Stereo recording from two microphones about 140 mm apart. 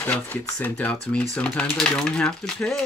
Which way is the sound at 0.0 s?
10° left (ahead or behind).